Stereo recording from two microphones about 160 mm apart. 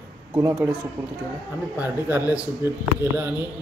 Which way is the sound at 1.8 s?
15° right (ahead or behind).